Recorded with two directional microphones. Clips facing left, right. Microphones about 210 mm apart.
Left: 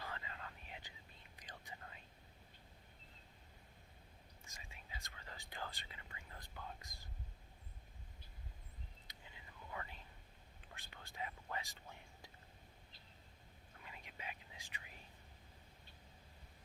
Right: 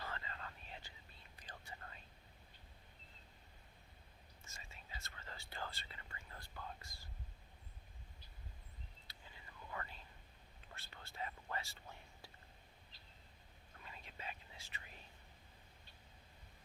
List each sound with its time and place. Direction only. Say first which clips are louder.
0.1 s whispering: right 1 dB; 10° left (ahead or behind)
4.4 s whispering: right 1 dB; 15° left (ahead or behind)
9.0 s whispering: even; 10° left (ahead or behind)
13.8 s whispering: right 1 dB; 15° left (ahead or behind)